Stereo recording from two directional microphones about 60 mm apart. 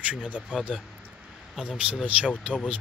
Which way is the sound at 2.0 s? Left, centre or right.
Right.